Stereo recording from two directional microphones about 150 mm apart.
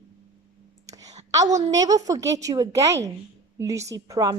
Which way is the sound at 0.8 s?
25° right (ahead or behind).